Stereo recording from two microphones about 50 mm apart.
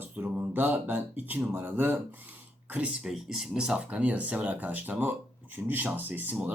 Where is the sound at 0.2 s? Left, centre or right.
Right.